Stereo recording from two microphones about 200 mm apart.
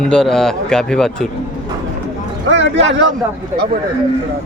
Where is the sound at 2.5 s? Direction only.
65° right (ahead or behind).